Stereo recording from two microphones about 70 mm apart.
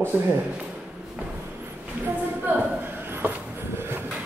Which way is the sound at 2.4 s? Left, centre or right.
Right.